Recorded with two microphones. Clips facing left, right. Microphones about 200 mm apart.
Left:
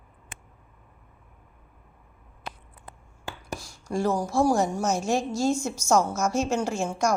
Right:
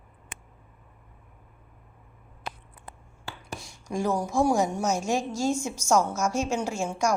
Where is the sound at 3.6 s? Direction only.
15° right (ahead or behind).